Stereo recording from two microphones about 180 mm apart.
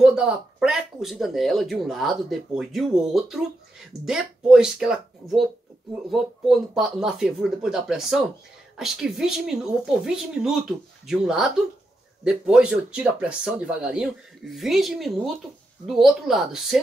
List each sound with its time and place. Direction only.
0.0 s speech: 5° right (ahead or behind)
6.0 s speech: centre (ahead or behind)